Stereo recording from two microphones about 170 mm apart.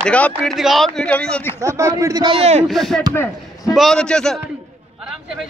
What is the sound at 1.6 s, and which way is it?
A man's voice, 20° right (ahead or behind).